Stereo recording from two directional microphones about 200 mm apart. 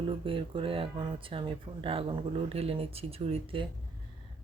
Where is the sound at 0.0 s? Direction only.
25° right (ahead or behind).